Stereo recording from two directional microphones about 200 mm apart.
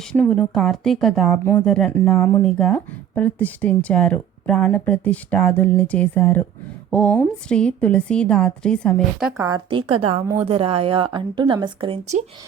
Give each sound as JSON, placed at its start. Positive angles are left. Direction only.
{"t": 0.1, "sound": "a woman's voice", "side_deg": 5}
{"t": 9.4, "sound": "a woman's voice", "side_deg": -20}